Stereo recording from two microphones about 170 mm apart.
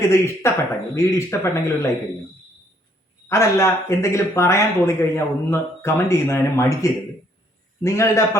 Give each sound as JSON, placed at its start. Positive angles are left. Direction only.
{"t": 0.0, "sound": "speech", "side_deg": 15}
{"t": 3.2, "sound": "speech", "side_deg": 15}